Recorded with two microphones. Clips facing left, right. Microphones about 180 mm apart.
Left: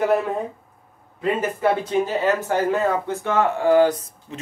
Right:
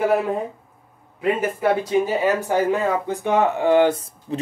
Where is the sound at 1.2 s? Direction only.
10° right (ahead or behind).